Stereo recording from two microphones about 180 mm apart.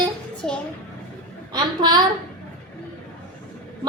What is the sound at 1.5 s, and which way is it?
Speech, 25° right (ahead or behind).